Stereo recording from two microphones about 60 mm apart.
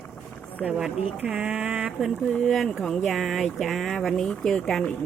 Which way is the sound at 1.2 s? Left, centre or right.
Right.